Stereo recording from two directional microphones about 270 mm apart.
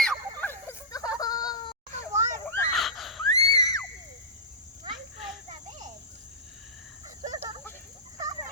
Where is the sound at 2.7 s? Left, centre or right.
Centre.